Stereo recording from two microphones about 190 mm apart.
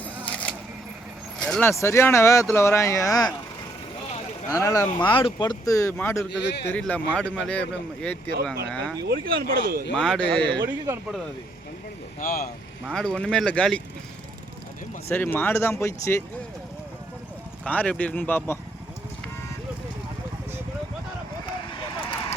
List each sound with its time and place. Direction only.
0.3 s a sound: 5° left (ahead or behind)
1.4 s speech: 5° left (ahead or behind)
4.4 s speech: 15° left (ahead or behind)
6.3 s speech: 65° left (ahead or behind)
6.7 s speech: 10° left (ahead or behind)
9.0 s speech: 55° right (ahead or behind)
9.9 s speech: 5° left (ahead or behind)
10.7 s speech: 10° right (ahead or behind)
12.2 s speech: 50° left (ahead or behind)
12.9 s speech: 5° left (ahead or behind)
15.1 s speech: 10° left (ahead or behind)
17.7 s speech: 5° left (ahead or behind)
21.7 s vehicle: 25° left (ahead or behind)